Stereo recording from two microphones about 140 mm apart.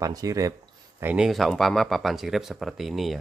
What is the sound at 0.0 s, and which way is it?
Speech, 25° right (ahead or behind).